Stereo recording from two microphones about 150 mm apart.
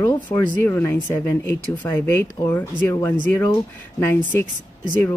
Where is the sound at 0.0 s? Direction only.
15° left (ahead or behind).